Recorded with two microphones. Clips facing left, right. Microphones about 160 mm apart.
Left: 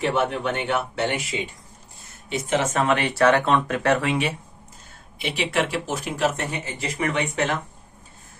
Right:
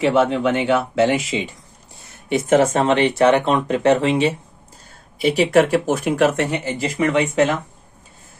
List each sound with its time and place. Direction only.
0.0 s speech: 90° right
2.3 s speech: 45° right (ahead or behind)
2.7 s speech: 25° right (ahead or behind)
5.2 s speech: 40° right (ahead or behind); by 7.2 s 90° right